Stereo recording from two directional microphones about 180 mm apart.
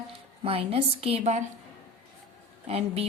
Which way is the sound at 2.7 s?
35° right (ahead or behind).